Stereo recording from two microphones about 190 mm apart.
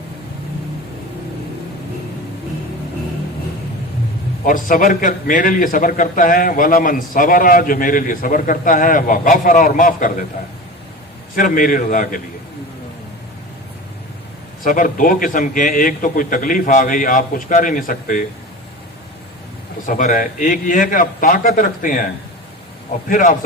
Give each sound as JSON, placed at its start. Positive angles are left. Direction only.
{"t": 4.4, "sound": "a man's voice", "side_deg": 45}
{"t": 11.3, "sound": "a man's voice", "side_deg": 45}
{"t": 14.6, "sound": "a man's voice", "side_deg": 45}
{"t": 19.8, "sound": "a man's voice", "side_deg": 45}